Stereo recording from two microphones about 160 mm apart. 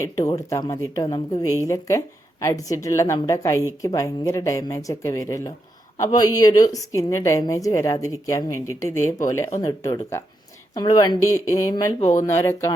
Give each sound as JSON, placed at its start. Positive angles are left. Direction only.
{"t": 0.0, "sound": "a woman's voice", "side_deg": 20}
{"t": 11.9, "sound": "speech", "side_deg": 45}
{"t": 12.2, "sound": "speech", "side_deg": 20}